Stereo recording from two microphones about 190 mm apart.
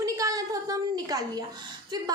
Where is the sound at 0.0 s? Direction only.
20° right (ahead or behind).